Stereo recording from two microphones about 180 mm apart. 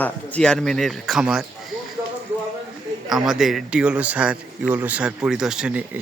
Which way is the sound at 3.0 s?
Centre (ahead or behind).